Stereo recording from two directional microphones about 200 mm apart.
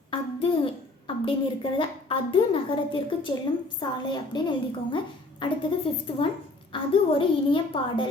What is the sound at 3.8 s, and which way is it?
A woman's voice, 20° left (ahead or behind).